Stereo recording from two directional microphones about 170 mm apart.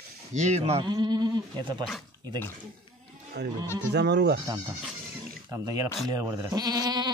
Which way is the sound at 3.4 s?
80° right.